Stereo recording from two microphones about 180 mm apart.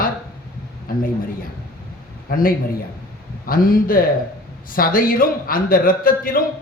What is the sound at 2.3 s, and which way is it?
A man's voice, 50° left (ahead or behind).